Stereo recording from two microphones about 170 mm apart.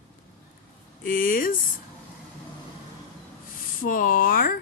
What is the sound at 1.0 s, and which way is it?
Speech, 55° left (ahead or behind).